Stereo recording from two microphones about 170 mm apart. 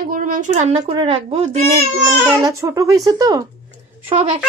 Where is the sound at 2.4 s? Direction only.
20° right (ahead or behind).